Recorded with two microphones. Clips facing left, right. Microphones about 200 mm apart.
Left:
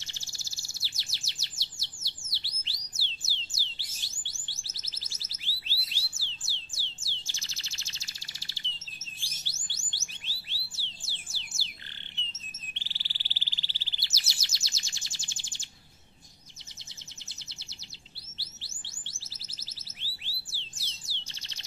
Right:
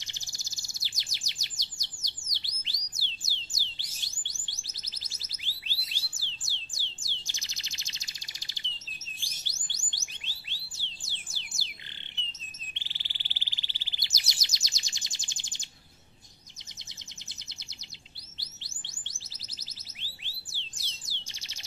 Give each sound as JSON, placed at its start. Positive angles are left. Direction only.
{"t": 0.0, "sound": "chirp", "side_deg": -15}
{"t": 7.2, "sound": "bird", "side_deg": -15}
{"t": 9.2, "sound": "music", "side_deg": -15}
{"t": 12.3, "sound": "chirp", "side_deg": -15}
{"t": 18.4, "sound": "chirp", "side_deg": -15}
{"t": 20.0, "sound": "bird", "side_deg": -15}